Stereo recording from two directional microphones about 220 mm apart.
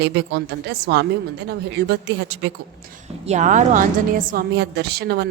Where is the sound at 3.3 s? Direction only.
35° right (ahead or behind).